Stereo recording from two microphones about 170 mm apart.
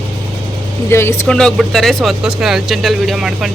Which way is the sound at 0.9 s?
15° left (ahead or behind).